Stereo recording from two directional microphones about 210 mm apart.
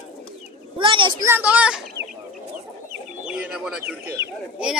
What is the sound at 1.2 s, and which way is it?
Speech, 10° right (ahead or behind).